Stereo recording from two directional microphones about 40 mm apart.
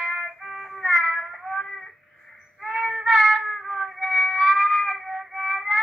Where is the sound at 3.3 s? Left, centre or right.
Centre.